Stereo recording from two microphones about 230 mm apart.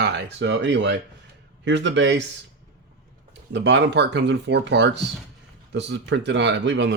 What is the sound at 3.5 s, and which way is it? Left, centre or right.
Speech, right.